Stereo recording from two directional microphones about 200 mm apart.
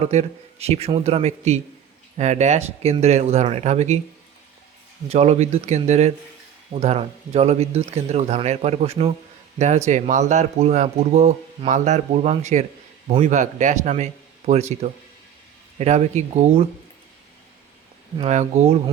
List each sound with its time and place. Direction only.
0.0 s speech: 35° right (ahead or behind)
5.0 s speech: 30° right (ahead or behind)
18.2 s speech: 35° right (ahead or behind)